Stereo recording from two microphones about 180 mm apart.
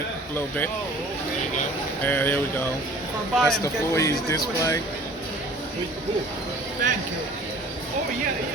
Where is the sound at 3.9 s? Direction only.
15° left (ahead or behind).